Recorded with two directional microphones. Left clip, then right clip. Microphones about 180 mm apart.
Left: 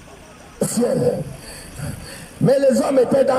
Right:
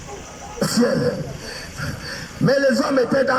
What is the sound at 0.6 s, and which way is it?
Speech, 15° left (ahead or behind).